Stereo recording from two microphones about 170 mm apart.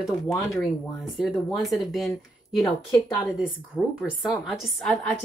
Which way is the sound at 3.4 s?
5° right (ahead or behind).